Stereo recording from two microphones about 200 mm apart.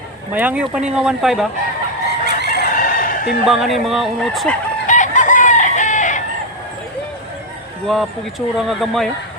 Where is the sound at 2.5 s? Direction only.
45° left (ahead or behind).